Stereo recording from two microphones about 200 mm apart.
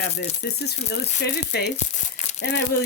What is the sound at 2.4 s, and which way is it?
Speech, 60° left (ahead or behind).